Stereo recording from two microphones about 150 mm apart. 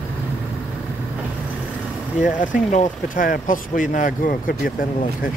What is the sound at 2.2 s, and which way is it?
Speech, 60° left (ahead or behind).